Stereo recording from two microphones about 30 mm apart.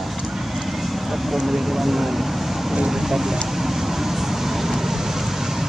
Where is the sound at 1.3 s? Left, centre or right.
Centre.